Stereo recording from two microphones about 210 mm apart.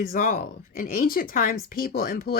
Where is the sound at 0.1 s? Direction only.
40° left (ahead or behind).